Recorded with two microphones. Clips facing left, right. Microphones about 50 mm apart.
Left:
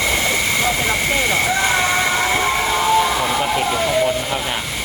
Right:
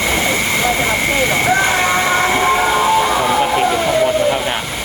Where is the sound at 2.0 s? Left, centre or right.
Centre.